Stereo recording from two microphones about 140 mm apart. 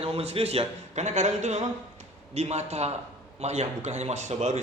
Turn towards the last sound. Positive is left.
turn(degrees=-55)  # may be behind; listen again after turning